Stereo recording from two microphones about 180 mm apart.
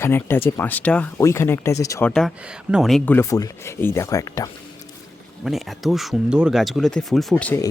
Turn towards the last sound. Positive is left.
turn(degrees=5)  # may be behind; listen again after turning